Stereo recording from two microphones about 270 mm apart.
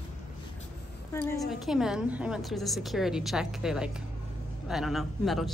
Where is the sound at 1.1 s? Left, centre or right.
Centre.